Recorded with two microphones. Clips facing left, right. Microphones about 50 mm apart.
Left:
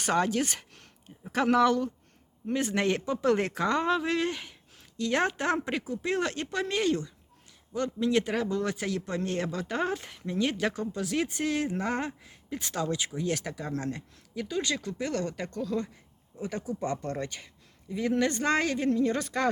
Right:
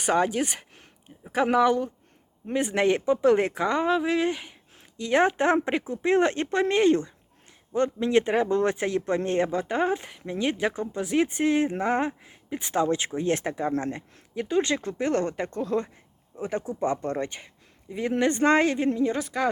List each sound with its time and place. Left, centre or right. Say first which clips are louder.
0.0 s speech: right 3 dB; centre
19.1 s speech: right 2 dB; centre